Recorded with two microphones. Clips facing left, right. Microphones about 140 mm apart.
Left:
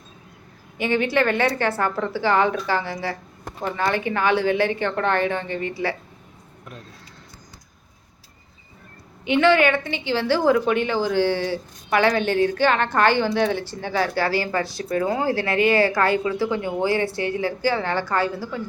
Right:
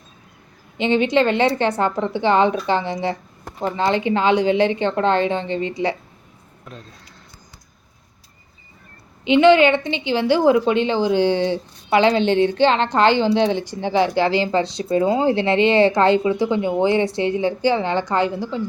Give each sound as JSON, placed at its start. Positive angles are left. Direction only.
{"t": 0.8, "sound": "a woman's voice", "side_deg": -20}
{"t": 9.2, "sound": "a woman's voice", "side_deg": -20}